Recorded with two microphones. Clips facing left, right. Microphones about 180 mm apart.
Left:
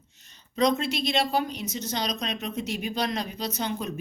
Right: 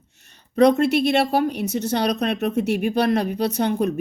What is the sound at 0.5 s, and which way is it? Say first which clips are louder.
A woman's voice: right 9 dB; 60° right (ahead or behind).